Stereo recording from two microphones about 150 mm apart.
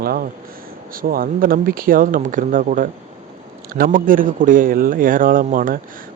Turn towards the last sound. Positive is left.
turn(degrees=-65)  # may be behind; listen again after turning